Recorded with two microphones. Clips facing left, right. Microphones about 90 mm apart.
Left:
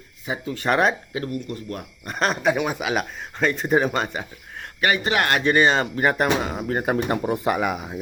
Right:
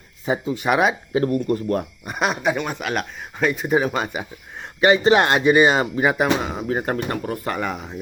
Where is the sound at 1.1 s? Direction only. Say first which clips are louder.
Right 9 dB; 40° right (ahead or behind).